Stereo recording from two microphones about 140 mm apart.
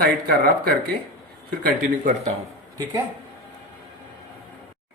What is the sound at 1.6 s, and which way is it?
Speech, 70° right (ahead or behind).